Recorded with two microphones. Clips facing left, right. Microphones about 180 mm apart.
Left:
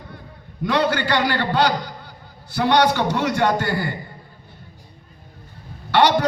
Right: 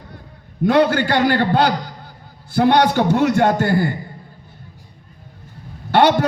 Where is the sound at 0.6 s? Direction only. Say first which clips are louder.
Right 5 dB; 50° right (ahead or behind).